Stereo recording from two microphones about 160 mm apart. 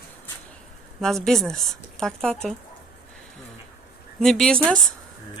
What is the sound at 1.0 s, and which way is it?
Speech, centre (ahead or behind).